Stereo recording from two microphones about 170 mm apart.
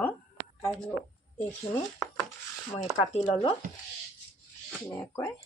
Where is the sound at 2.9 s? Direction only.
35° left (ahead or behind).